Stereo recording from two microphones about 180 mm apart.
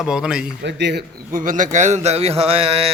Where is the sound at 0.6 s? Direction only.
75° right (ahead or behind).